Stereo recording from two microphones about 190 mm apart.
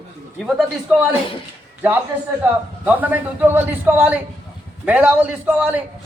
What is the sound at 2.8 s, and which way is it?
A man's voice, 10° right (ahead or behind).